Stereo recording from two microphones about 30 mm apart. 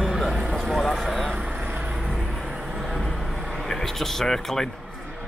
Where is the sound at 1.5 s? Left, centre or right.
Right.